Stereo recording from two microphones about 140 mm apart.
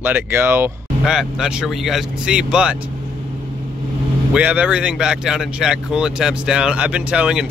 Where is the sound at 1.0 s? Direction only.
5° right (ahead or behind).